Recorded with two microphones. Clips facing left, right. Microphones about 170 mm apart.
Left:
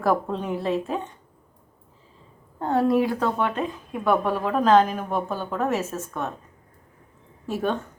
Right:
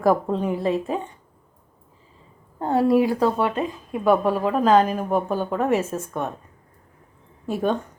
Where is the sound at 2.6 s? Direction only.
10° right (ahead or behind).